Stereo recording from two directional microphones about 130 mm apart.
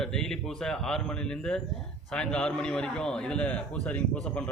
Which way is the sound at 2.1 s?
5° left (ahead or behind).